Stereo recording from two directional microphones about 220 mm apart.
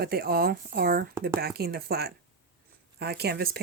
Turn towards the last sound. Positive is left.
turn(degrees=-45)  # may be behind; listen again after turning